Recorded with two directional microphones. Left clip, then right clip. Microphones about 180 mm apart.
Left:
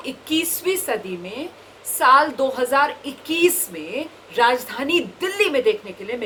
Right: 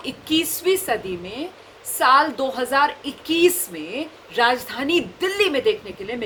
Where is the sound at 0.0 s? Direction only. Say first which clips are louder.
Right 1 dB; 25° right (ahead or behind).